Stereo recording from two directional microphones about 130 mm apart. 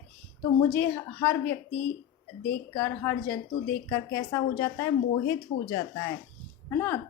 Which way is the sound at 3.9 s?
25° left (ahead or behind).